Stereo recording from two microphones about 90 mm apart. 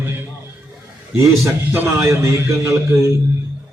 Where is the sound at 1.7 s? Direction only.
25° right (ahead or behind).